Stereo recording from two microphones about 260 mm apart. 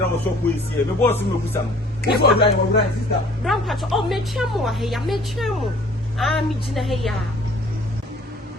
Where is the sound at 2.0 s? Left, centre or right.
Left.